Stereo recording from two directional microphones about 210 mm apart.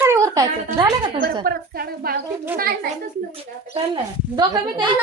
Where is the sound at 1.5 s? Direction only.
45° right (ahead or behind).